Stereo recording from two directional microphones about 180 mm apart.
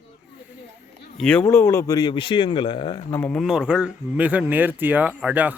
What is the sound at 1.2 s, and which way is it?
Speech, 5° left (ahead or behind).